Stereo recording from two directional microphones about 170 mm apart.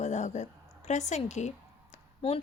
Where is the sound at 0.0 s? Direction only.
45° left (ahead or behind).